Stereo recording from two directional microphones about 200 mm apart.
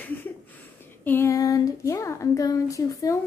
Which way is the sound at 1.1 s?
15° left (ahead or behind).